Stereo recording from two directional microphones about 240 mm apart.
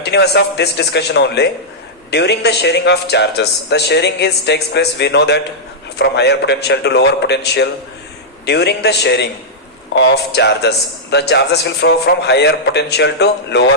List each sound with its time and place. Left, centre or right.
0.0 s a man's voice: left